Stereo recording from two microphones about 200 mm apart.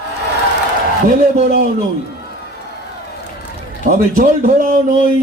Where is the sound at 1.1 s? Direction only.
40° right (ahead or behind).